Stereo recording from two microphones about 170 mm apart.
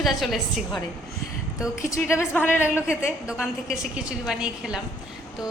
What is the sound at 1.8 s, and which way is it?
A woman's voice, 15° left (ahead or behind).